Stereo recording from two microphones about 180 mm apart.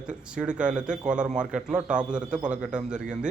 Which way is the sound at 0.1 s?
5° right (ahead or behind).